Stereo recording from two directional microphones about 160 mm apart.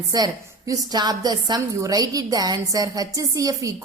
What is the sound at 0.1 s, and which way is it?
A woman's voice, 20° right (ahead or behind).